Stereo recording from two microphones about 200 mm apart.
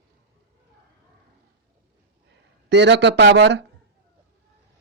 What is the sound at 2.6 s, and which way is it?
Speech, 60° right (ahead or behind).